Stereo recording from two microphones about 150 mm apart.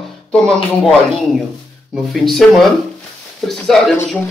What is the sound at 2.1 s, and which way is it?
Speech, centre (ahead or behind).